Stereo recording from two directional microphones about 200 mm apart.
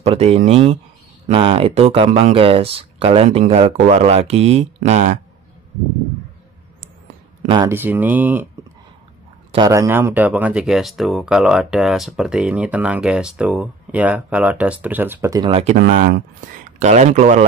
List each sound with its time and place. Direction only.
0.0 s speech: 30° right (ahead or behind)
7.4 s speech: 20° right (ahead or behind)
7.7 s speech: 10° right (ahead or behind)
9.5 s speech: 20° right (ahead or behind)
15.1 s speech: 20° right (ahead or behind)
15.5 s speech: 35° right (ahead or behind)